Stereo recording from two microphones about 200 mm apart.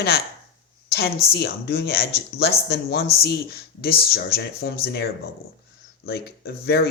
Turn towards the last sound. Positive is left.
turn(degrees=50)  # may be behind; listen again after turning